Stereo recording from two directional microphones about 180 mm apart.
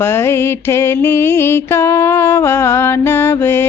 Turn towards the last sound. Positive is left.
turn(degrees=15)  # may be behind; listen again after turning